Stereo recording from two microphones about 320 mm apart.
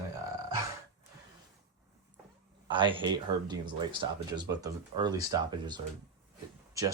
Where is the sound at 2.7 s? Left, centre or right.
Centre.